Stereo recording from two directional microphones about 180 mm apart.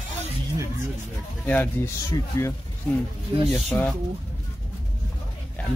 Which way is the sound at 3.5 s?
10° left (ahead or behind).